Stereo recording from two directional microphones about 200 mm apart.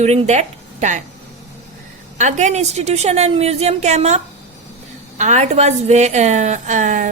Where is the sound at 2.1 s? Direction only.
35° right (ahead or behind).